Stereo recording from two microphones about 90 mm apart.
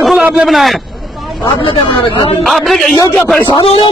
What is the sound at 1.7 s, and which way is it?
Speech, 70° left (ahead or behind).